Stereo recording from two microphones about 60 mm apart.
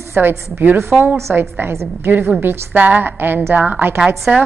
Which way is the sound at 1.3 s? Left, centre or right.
Right.